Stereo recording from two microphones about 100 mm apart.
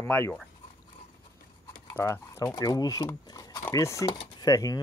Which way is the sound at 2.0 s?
25° left (ahead or behind).